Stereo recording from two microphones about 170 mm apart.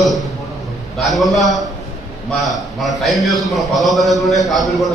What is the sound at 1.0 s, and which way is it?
A man's voice, centre (ahead or behind).